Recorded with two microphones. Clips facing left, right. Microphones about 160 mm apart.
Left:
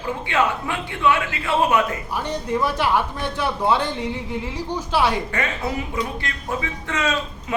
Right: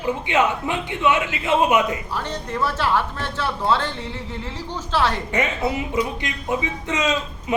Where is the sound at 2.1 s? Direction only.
15° left (ahead or behind).